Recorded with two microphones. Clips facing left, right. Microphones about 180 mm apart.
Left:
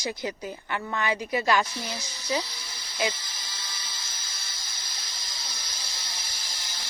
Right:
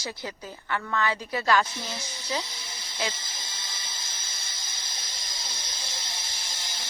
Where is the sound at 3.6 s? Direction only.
25° right (ahead or behind).